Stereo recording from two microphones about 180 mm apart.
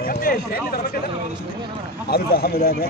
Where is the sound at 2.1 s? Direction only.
60° left (ahead or behind).